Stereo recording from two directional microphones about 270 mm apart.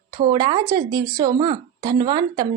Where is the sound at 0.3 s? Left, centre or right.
Centre.